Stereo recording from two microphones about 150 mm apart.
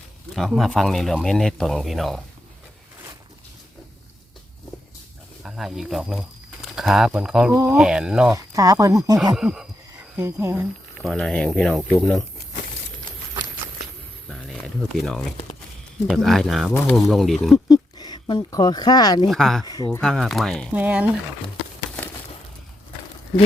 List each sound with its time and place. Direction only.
0.3 s speech: centre (ahead or behind)
5.4 s speech: centre (ahead or behind)
8.3 s speech: 25° right (ahead or behind)
9.3 s speech: 5° right (ahead or behind)
10.2 s speech: 15° right (ahead or behind)
11.0 s speech: 5° left (ahead or behind)
14.3 s speech: centre (ahead or behind)
17.7 s speech: 25° left (ahead or behind)
19.3 s speech: centre (ahead or behind)
19.6 s speech: 25° left (ahead or behind)
20.0 s speech: 5° left (ahead or behind)
20.7 s speech: 10° right (ahead or behind)